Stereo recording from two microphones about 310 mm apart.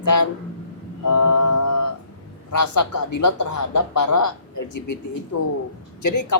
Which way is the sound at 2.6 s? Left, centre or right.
Left.